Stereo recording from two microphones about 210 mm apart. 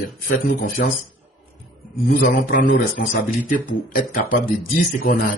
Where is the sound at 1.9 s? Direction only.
40° left (ahead or behind).